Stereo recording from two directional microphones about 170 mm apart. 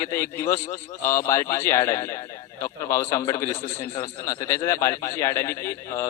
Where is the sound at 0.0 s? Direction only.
15° left (ahead or behind).